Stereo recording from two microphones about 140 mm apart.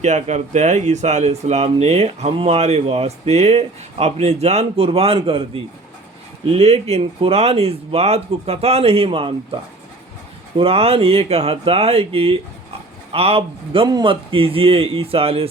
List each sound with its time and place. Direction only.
0.0 s speech: 55° right (ahead or behind)
10.6 s a man's voice: 45° right (ahead or behind)